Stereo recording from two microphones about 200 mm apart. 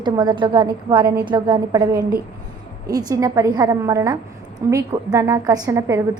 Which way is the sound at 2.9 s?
20° right (ahead or behind).